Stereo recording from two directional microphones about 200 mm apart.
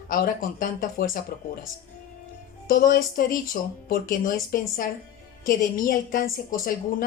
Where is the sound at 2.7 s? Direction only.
45° left (ahead or behind).